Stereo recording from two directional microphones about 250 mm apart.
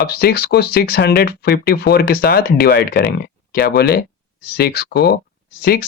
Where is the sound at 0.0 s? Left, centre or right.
Left.